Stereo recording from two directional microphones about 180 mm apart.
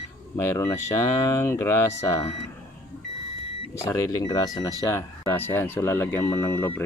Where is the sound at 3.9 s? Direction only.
20° left (ahead or behind).